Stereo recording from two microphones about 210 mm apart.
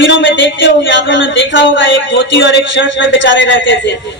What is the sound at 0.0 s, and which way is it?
Speech, 60° left (ahead or behind).